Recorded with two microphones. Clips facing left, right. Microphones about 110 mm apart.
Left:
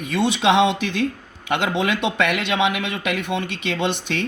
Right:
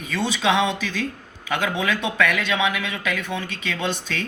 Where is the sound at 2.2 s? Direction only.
65° left (ahead or behind).